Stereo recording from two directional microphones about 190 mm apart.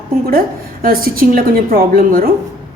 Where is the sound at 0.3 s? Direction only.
50° right (ahead or behind).